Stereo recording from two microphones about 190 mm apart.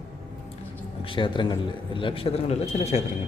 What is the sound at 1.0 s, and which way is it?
A man's voice, 25° left (ahead or behind).